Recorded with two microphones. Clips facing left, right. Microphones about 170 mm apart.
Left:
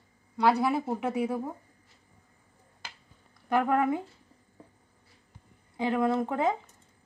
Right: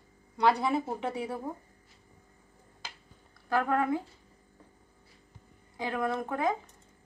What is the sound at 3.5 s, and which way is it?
Speech, 20° left (ahead or behind).